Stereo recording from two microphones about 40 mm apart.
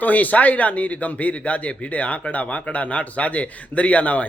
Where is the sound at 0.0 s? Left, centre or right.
Left.